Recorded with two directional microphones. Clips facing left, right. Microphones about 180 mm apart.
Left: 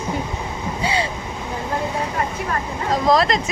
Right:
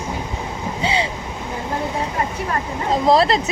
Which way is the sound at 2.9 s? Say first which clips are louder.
Right 2 dB; 30° right (ahead or behind).